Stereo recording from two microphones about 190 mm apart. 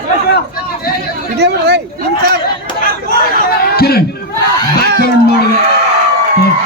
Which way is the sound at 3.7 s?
55° left (ahead or behind).